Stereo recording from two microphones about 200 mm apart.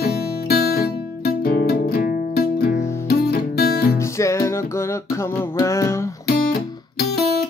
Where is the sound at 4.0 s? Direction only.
15° left (ahead or behind).